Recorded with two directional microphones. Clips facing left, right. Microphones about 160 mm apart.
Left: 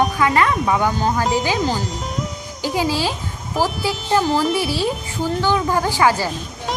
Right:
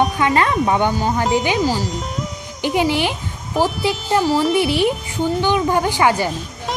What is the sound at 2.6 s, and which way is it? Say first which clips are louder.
Speech: right 3 dB; 20° right (ahead or behind).